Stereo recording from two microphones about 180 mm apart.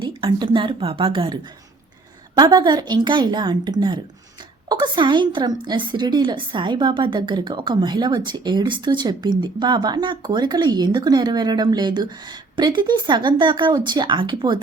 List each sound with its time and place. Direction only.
0.0 s a woman's voice: 25° right (ahead or behind)